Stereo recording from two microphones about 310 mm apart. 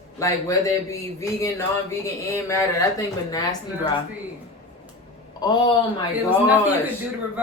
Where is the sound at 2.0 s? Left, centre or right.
Centre.